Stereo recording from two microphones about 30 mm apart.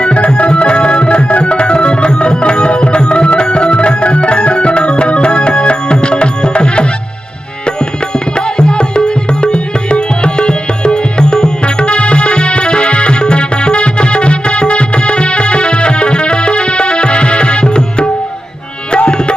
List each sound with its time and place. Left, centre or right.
0.0 s tabla: left
8.1 s music: left
18.9 s tabla: left